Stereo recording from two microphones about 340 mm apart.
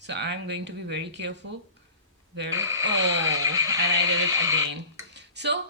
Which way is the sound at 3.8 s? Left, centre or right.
Right.